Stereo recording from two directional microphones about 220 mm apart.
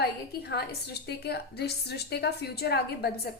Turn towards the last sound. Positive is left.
turn(degrees=45)  # may be behind; listen again after turning